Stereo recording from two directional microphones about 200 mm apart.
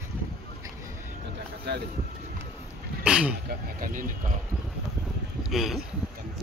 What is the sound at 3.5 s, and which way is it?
Speech, 45° right (ahead or behind).